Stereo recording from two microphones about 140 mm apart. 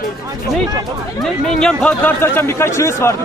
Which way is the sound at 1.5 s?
5° left (ahead or behind).